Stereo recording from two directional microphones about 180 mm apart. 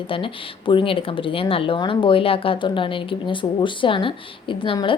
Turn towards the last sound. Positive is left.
turn(degrees=30)  # may be behind; listen again after turning